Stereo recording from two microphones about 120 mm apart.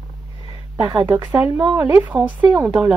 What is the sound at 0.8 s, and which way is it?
Speech, 35° right (ahead or behind).